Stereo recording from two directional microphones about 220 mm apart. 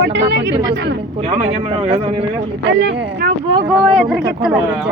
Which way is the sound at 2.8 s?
45° right (ahead or behind).